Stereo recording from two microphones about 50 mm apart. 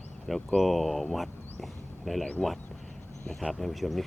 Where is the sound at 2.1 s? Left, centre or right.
Centre.